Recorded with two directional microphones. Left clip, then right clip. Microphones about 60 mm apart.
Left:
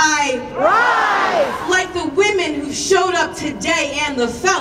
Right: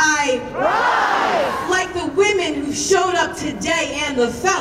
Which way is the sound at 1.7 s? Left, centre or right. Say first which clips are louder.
Left 2 dB; centre.